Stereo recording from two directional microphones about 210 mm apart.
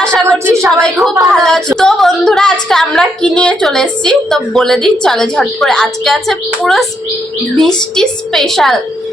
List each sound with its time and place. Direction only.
0.0 s a sound: 5° left (ahead or behind)
0.3 s a woman's voice: 15° right (ahead or behind)
0.8 s a woman's voice: centre (ahead or behind)
7.9 s a woman's voice: centre (ahead or behind)